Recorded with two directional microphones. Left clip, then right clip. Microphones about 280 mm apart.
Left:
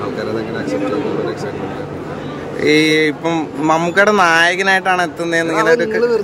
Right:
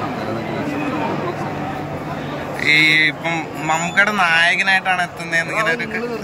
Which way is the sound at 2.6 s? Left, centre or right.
Centre.